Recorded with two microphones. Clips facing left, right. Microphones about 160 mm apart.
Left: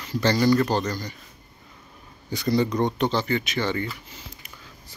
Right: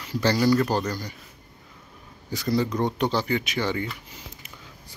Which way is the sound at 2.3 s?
Centre (ahead or behind).